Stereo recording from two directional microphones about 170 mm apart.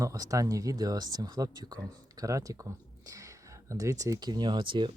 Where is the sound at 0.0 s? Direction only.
20° right (ahead or behind).